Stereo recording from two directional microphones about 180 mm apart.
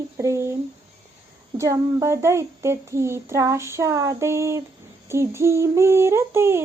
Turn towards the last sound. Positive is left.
turn(degrees=-15)  # may be behind; listen again after turning